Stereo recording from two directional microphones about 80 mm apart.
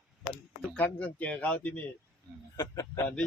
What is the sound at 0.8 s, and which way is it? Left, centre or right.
Speech, left.